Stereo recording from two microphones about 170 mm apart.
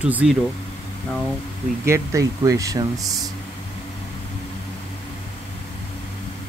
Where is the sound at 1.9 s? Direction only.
15° right (ahead or behind).